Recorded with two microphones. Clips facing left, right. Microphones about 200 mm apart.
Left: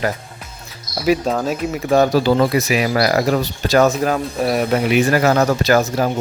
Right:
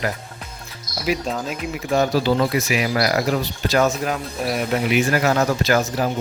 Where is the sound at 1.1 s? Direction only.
40° left (ahead or behind).